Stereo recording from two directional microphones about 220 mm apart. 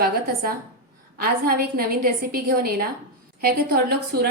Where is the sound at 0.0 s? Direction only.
45° right (ahead or behind).